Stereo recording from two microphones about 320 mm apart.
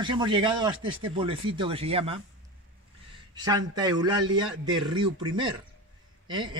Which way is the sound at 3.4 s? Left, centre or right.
Centre.